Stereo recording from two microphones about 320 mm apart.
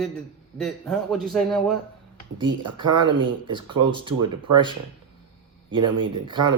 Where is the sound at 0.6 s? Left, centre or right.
Centre.